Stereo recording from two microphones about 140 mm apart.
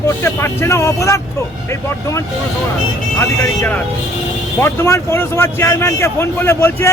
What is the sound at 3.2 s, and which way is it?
A man's voice, 15° left (ahead or behind).